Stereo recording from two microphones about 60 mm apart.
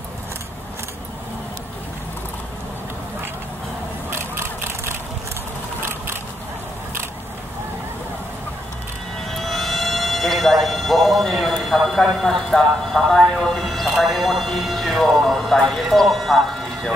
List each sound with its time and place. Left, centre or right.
4.1 s vehicle: right
5.8 s a sound: right
9.3 s speech: centre